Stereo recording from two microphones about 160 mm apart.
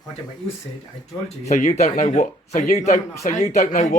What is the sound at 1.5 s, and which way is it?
A man's voice, 50° left (ahead or behind).